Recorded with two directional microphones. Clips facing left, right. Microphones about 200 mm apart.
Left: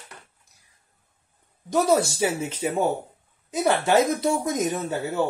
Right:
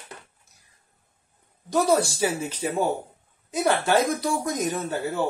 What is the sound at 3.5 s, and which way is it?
Speech, 20° left (ahead or behind).